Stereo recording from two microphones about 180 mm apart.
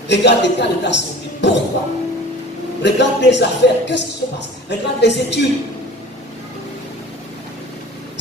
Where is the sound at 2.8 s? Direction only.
75° left (ahead or behind).